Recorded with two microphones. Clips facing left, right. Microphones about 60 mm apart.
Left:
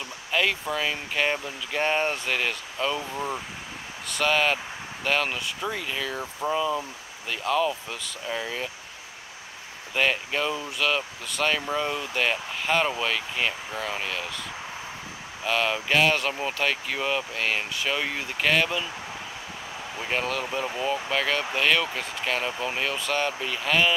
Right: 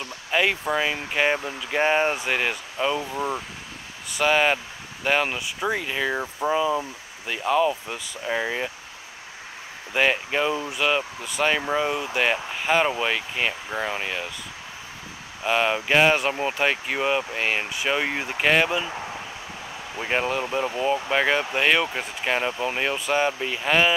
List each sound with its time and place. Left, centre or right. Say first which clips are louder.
0.3 s speech: right 3 dB; centre
8.3 s speech: right 5 dB; right
9.9 s speech: right 3 dB; centre
15.4 s speech: right 3 dB; centre
20.0 s speech: right 4 dB; centre